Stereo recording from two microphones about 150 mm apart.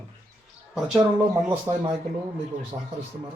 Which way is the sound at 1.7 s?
15° right (ahead or behind).